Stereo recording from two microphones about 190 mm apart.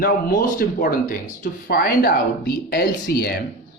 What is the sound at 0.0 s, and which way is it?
Speech, 45° left (ahead or behind).